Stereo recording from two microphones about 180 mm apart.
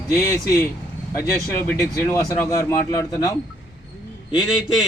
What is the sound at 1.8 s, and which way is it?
Speech, 15° left (ahead or behind).